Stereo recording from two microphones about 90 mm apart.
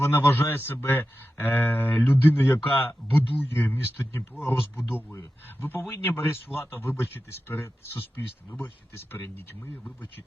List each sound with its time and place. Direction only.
0.0 s speech: 25° left (ahead or behind)